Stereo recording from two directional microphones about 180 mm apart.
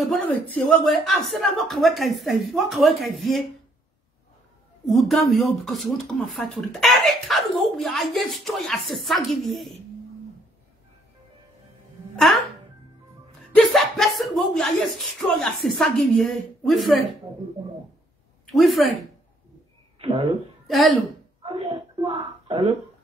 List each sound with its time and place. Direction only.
0.0 s speech: 5° left (ahead or behind)
4.8 s speech: centre (ahead or behind)
13.6 s speech: centre (ahead or behind)
18.5 s speech: centre (ahead or behind)
20.0 s a sound: 30° right (ahead or behind)
20.6 s speech: centre (ahead or behind)
21.4 s a sound: 30° right (ahead or behind)